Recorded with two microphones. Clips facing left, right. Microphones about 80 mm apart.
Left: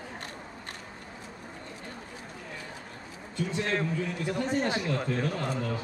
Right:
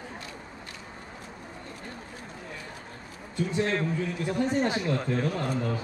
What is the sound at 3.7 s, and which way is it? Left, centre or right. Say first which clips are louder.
A man's voice: right 1 dB; centre.